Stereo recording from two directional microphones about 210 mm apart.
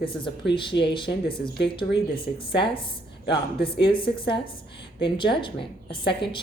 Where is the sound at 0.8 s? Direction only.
25° left (ahead or behind).